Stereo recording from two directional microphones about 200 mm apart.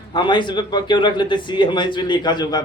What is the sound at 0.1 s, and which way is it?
Speech, 20° left (ahead or behind).